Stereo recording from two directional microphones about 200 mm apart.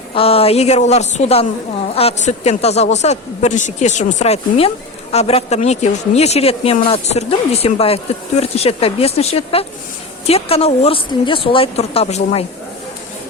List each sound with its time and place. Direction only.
0.1 s a woman's voice: 30° left (ahead or behind)